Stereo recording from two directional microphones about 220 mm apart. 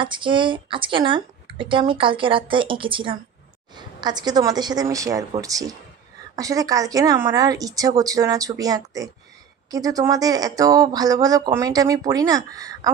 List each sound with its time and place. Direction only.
0.0 s speech: 20° right (ahead or behind)